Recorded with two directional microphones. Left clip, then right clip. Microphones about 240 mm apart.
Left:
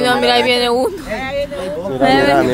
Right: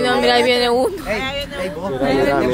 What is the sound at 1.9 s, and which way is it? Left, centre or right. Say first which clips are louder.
Speech: left 5 dB; left.